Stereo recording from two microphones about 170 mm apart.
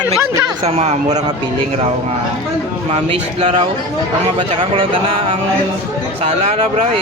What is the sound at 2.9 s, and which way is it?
Speech, 35° right (ahead or behind).